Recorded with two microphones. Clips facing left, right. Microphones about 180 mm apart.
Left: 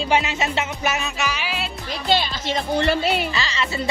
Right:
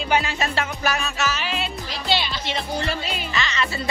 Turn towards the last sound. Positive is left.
turn(degrees=30)  # may be behind; listen again after turning